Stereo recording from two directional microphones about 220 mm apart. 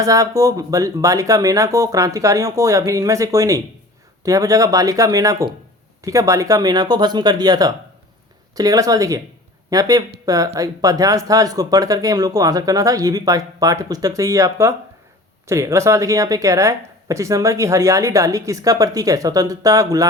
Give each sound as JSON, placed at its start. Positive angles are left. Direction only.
{"t": 0.0, "sound": "speech", "side_deg": -15}